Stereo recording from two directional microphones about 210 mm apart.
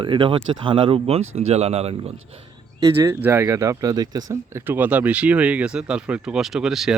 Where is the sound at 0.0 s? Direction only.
25° right (ahead or behind).